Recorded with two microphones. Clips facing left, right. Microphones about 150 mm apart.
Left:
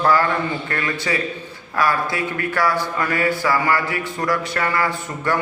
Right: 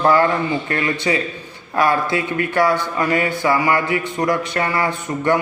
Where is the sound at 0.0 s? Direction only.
25° right (ahead or behind).